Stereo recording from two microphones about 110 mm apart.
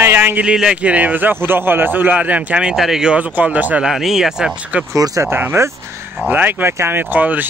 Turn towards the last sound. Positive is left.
turn(degrees=-15)  # may be behind; listen again after turning